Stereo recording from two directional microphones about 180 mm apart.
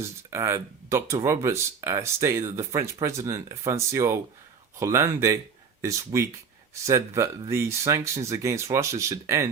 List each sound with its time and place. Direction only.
0.0 s speech: 15° right (ahead or behind)